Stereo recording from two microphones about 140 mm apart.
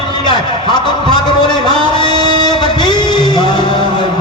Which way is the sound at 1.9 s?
30° left (ahead or behind).